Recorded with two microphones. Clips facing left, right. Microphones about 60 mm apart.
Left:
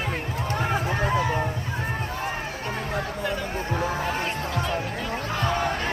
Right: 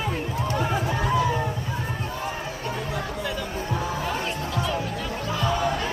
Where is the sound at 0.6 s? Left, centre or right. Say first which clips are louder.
Left 1 dB; left.